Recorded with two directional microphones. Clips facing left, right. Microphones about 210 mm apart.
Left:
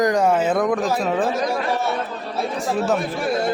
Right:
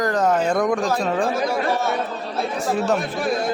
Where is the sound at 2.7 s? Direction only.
Centre (ahead or behind).